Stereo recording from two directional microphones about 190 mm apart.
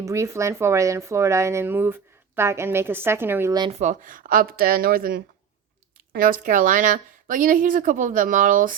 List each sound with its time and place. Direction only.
0.0 s speech: 15° right (ahead or behind)
3.7 s a woman's voice: 40° right (ahead or behind)